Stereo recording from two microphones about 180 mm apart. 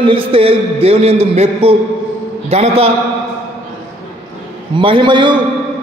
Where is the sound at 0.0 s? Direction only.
30° right (ahead or behind).